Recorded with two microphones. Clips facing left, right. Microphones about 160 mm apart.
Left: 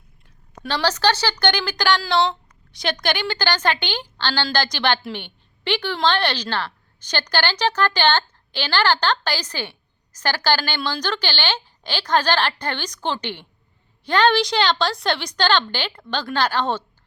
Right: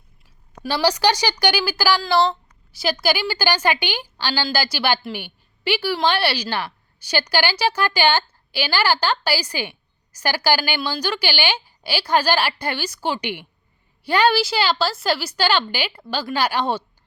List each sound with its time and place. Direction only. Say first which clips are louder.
0.6 s speech: right 2 dB; 10° right (ahead or behind)